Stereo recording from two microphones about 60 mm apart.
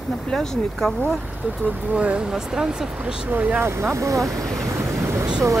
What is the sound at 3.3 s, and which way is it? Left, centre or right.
Speech, right.